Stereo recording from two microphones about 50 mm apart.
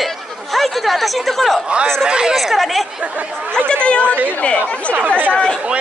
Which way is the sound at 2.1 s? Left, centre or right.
Centre.